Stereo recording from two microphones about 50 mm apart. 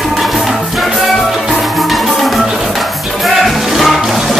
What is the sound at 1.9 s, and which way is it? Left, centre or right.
Music, centre.